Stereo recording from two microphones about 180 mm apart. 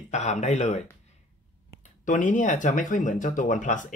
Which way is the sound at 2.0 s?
45° left (ahead or behind).